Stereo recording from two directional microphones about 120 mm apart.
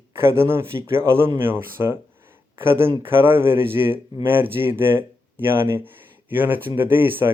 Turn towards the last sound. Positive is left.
turn(degrees=-20)  # may be behind; listen again after turning